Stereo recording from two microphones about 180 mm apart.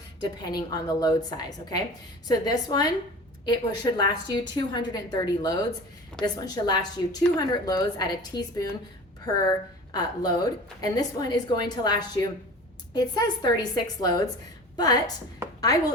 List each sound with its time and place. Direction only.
0.2 s a woman's voice: 20° left (ahead or behind)